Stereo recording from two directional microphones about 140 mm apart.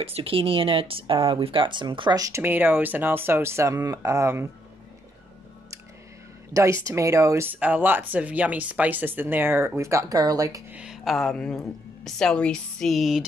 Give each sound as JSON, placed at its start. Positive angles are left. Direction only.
{"t": 0.0, "sound": "speech", "side_deg": -45}
{"t": 6.5, "sound": "speech", "side_deg": -20}
{"t": 10.7, "sound": "a woman's voice", "side_deg": -5}